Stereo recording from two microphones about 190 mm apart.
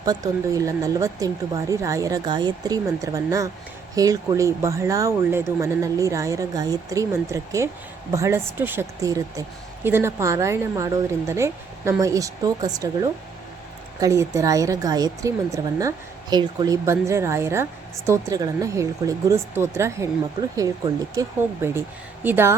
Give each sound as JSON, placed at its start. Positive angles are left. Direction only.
{"t": 0.0, "sound": "speech", "side_deg": -20}